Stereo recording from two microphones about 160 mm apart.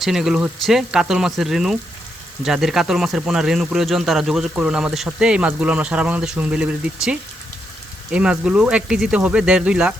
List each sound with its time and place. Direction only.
0.0 s speech: 5° right (ahead or behind)